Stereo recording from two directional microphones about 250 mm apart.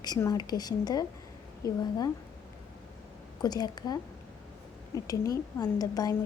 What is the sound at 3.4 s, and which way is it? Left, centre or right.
Speech, centre.